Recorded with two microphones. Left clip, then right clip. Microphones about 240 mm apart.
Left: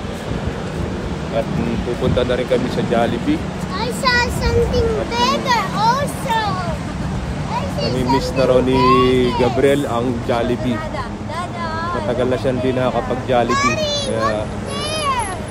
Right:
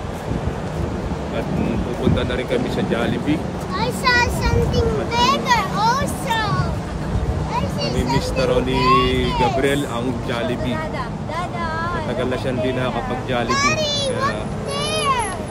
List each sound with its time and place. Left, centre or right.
2.1 s speech: centre
3.8 s a child's voice: centre
8.1 s speech: centre
12.2 s a child's voice: centre
15.0 s a sound: centre